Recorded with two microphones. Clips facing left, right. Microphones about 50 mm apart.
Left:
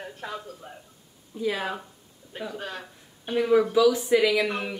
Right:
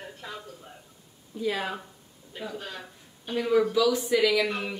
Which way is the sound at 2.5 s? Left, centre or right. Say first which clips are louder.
Left 3 dB; left.